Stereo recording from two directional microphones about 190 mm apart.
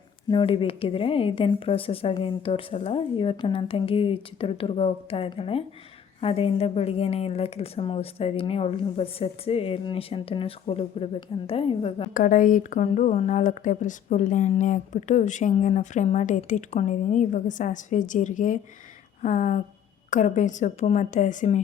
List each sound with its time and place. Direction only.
0.3 s a woman's voice: 25° left (ahead or behind)
12.1 s speech: 45° left (ahead or behind)